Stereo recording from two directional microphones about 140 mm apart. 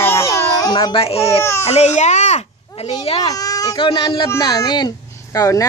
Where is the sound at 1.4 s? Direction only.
20° left (ahead or behind).